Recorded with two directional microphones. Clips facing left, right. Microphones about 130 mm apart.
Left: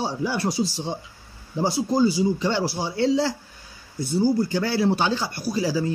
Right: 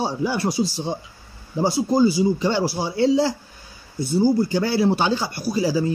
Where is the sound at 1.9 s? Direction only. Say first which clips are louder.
Right 2 dB; 10° right (ahead or behind).